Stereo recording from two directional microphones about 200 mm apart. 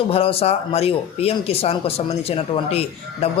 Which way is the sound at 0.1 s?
30° left (ahead or behind).